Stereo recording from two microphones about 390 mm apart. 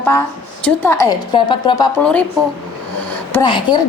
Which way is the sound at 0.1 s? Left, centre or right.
Centre.